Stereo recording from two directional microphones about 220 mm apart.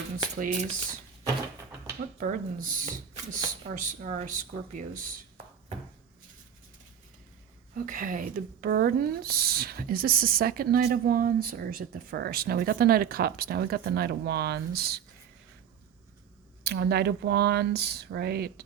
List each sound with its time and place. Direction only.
0.3 s speech: 35° right (ahead or behind)
2.1 s speech: 40° right (ahead or behind)
7.9 s speech: 40° right (ahead or behind)
16.6 s speech: 50° right (ahead or behind)